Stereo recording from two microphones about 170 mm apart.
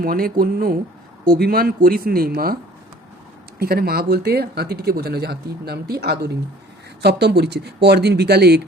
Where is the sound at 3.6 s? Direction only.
65° right (ahead or behind).